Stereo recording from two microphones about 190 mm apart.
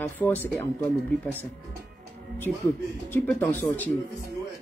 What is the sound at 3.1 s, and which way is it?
Speech, 10° left (ahead or behind).